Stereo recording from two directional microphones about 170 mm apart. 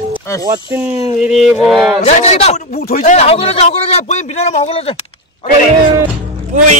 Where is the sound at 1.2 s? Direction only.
40° left (ahead or behind).